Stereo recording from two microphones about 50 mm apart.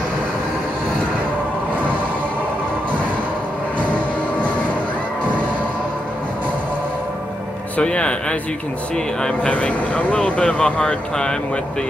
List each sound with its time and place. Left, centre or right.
7.7 s speech: left
9.5 s speech: left